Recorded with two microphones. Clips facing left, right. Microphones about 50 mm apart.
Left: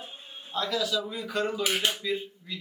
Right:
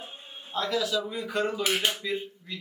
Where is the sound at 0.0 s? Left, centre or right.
Centre.